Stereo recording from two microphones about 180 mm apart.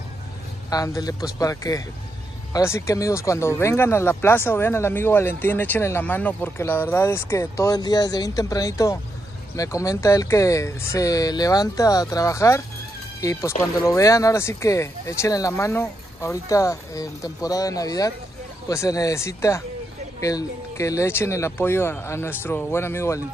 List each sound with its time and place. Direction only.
0.7 s speech: 20° left (ahead or behind)